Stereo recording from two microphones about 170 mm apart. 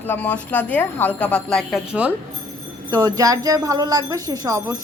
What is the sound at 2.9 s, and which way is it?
Speech, 20° right (ahead or behind).